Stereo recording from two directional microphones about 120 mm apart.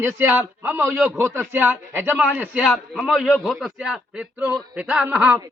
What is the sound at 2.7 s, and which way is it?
A man's voice, centre (ahead or behind).